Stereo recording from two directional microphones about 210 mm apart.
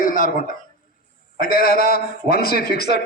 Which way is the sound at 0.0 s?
40° left (ahead or behind).